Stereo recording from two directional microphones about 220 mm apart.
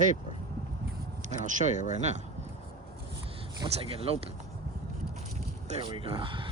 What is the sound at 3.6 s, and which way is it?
Speech, 25° right (ahead or behind).